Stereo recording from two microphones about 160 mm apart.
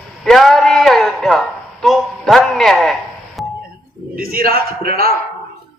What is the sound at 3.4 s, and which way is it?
Music, centre (ahead or behind).